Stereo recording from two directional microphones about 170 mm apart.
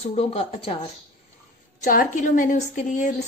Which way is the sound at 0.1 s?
35° left (ahead or behind).